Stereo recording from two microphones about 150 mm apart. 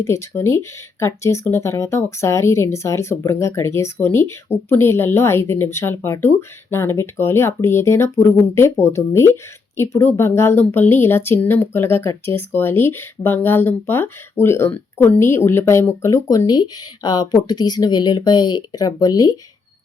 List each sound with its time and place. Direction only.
0.0 s speech: 20° left (ahead or behind)